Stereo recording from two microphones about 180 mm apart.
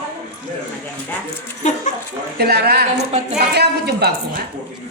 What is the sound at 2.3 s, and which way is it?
A woman's voice, 60° right (ahead or behind).